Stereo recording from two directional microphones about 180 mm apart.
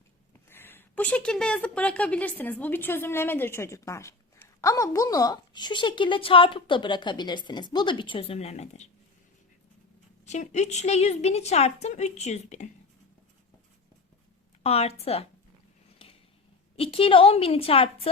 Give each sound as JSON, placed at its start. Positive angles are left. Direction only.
{"t": 0.4, "sound": "a woman's voice", "side_deg": 10}
{"t": 10.2, "sound": "a woman's voice", "side_deg": 40}
{"t": 14.6, "sound": "a woman's voice", "side_deg": 35}
{"t": 16.7, "sound": "a woman's voice", "side_deg": 30}